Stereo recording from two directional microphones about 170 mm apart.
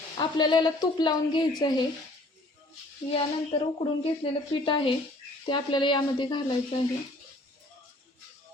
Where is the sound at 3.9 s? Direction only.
30° left (ahead or behind).